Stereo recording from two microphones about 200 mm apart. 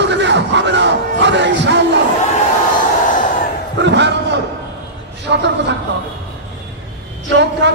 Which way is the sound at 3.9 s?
60° right (ahead or behind).